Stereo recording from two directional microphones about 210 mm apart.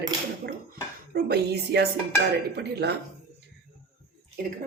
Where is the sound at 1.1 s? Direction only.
50° right (ahead or behind).